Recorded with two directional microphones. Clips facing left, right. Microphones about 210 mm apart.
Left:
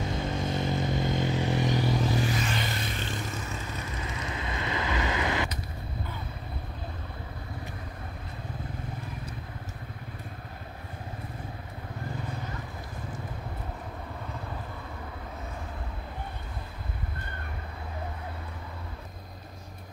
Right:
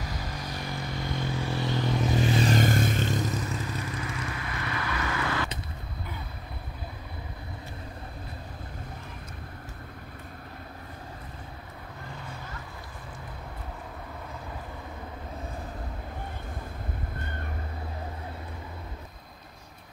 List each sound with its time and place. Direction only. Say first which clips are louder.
0.0 s vehicle: left 6 dB; 25° left (ahead or behind)
2.0 s a sound: right 3 dB; 20° right (ahead or behind)
2.4 s vehicle: right 8 dB; 45° right (ahead or behind)
4.0 s vehicle: even; 25° left (ahead or behind)